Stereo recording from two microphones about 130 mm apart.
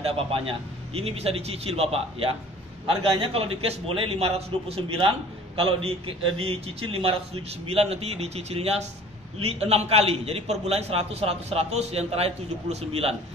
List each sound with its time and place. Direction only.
0.0 s a man's voice: 45° right (ahead or behind)